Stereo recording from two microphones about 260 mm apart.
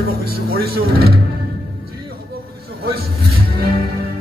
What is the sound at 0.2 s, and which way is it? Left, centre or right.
A man's voice, right.